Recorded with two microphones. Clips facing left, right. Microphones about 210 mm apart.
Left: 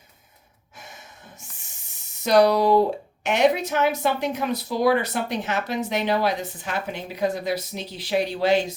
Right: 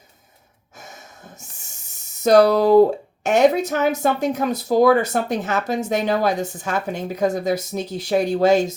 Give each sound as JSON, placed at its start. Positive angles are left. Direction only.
{"t": 0.8, "sound": "gasp", "side_deg": -45}
{"t": 2.2, "sound": "speech", "side_deg": -45}